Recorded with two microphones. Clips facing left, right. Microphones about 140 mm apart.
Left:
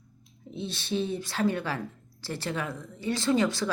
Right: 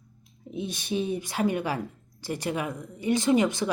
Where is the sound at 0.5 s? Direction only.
15° right (ahead or behind).